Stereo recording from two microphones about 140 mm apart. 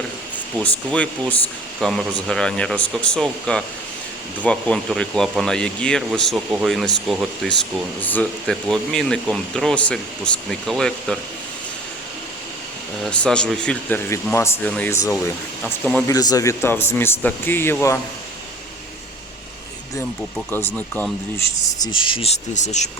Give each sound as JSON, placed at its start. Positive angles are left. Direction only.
{"t": 0.6, "sound": "speech", "side_deg": 10}
{"t": 13.1, "sound": "speech", "side_deg": 5}
{"t": 15.6, "sound": "speech", "side_deg": 5}
{"t": 16.0, "sound": "speech", "side_deg": 25}
{"t": 20.5, "sound": "speech", "side_deg": 15}
{"t": 21.8, "sound": "speech", "side_deg": 35}